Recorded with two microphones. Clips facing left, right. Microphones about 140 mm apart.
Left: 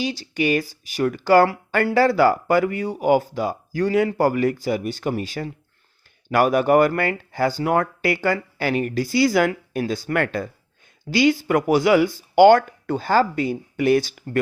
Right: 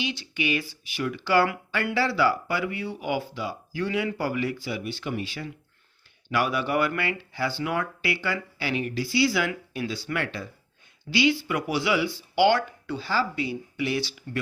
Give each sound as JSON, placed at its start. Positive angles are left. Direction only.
{"t": 0.0, "sound": "speech", "side_deg": 40}